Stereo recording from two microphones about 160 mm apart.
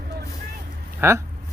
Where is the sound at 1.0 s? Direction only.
15° right (ahead or behind).